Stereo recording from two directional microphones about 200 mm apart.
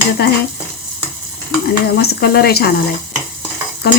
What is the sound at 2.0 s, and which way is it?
Speech, 50° left (ahead or behind).